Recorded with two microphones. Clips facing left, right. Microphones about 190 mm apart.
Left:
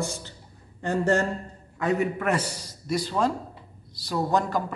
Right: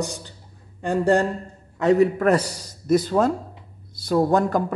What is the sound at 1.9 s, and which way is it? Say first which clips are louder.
A man's voice: right 8 dB; 35° right (ahead or behind).